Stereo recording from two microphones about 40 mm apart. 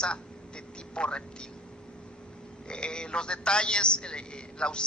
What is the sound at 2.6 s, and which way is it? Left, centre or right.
A man's voice, left.